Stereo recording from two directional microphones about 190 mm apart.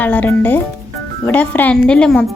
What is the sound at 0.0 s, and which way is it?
A woman's voice, 10° left (ahead or behind).